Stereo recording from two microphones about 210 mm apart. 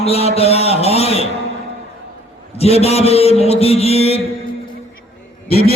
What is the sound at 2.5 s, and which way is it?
A man's voice, 30° left (ahead or behind).